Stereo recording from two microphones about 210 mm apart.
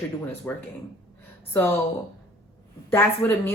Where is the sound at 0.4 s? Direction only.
10° left (ahead or behind).